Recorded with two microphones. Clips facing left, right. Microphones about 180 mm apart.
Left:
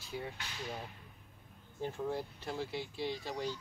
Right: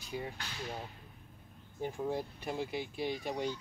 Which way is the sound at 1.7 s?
15° right (ahead or behind).